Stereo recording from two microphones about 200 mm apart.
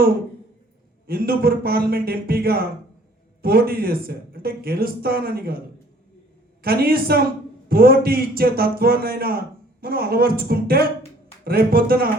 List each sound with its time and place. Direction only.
1.0 s speech: 50° right (ahead or behind)
6.6 s speech: 50° right (ahead or behind)